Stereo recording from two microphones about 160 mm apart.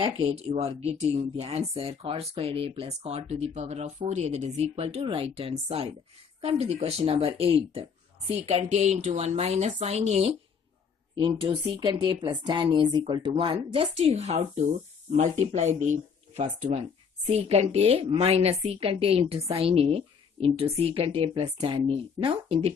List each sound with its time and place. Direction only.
0.0 s speech: 35° right (ahead or behind)
11.1 s speech: 30° right (ahead or behind)
14.0 s speech: 45° right (ahead or behind)